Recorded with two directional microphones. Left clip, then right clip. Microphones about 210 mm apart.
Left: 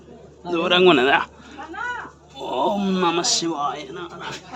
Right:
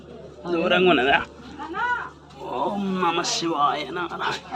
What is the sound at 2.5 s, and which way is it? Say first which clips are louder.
Speech: left 4 dB; 25° left (ahead or behind).